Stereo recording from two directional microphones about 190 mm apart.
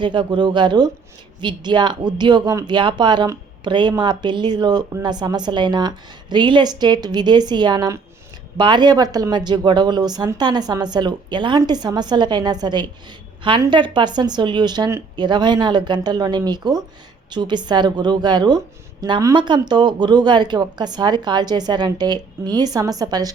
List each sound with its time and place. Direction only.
0.0 s speech: 25° right (ahead or behind)